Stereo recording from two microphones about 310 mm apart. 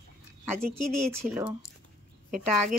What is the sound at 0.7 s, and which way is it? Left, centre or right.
Speech, right.